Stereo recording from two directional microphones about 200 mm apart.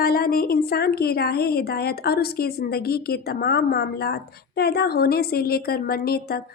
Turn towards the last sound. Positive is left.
turn(degrees=50)  # may be behind; listen again after turning